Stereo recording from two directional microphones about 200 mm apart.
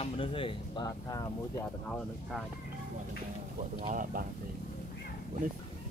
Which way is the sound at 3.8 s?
40° right (ahead or behind).